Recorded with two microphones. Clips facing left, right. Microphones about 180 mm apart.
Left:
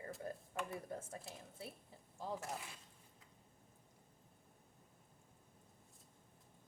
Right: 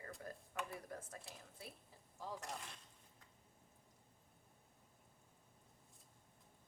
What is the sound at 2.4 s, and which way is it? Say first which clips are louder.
Speech: left 3 dB; 5° left (ahead or behind).